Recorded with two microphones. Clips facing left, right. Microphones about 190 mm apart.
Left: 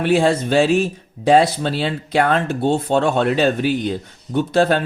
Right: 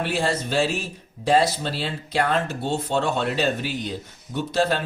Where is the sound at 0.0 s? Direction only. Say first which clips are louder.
Left 8 dB; 55° left (ahead or behind).